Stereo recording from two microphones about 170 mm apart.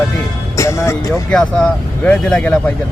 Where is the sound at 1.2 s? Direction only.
5° left (ahead or behind).